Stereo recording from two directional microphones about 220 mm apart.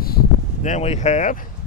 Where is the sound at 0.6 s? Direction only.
30° left (ahead or behind).